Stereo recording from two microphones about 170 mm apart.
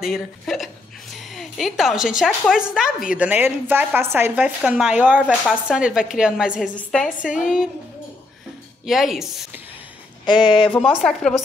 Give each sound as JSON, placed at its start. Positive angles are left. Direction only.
{"t": 0.0, "sound": "a woman's voice", "side_deg": 0}
{"t": 8.8, "sound": "a woman's voice", "side_deg": 0}
{"t": 10.2, "sound": "speech", "side_deg": 25}
{"t": 11.0, "sound": "a woman's voice", "side_deg": 5}